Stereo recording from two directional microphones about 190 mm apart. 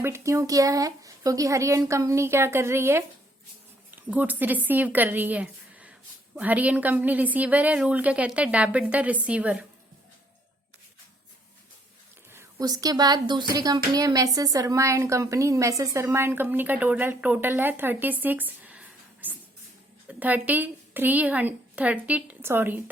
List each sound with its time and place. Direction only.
0.0 s a woman's voice: 15° right (ahead or behind)
12.3 s a woman's voice: 15° right (ahead or behind)